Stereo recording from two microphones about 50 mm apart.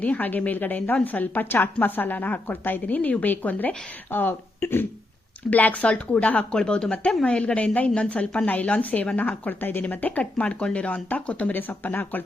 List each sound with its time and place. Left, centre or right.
0.0 s a woman's voice: left
5.5 s speech: left
6.5 s a woman's voice: centre
11.5 s a woman's voice: left